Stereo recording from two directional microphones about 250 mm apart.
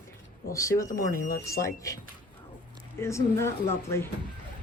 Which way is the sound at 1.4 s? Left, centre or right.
Centre.